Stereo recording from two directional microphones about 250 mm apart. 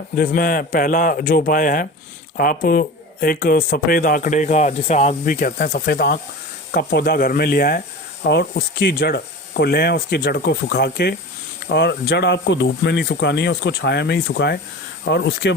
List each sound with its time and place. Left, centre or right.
0.2 s speech: left